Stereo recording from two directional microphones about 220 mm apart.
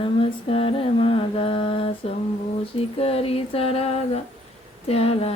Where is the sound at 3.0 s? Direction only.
25° left (ahead or behind).